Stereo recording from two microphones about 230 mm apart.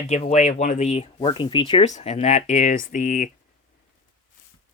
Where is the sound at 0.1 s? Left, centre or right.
Left.